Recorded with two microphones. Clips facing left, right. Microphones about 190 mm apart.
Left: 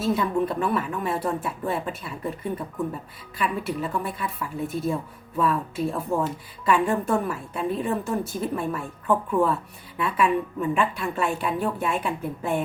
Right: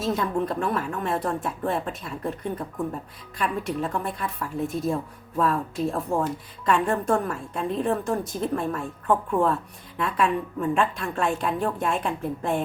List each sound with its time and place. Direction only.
0.0 s a woman's voice: 5° left (ahead or behind)